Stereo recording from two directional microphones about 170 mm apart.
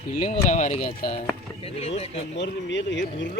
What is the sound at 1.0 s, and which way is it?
Speech, 35° left (ahead or behind).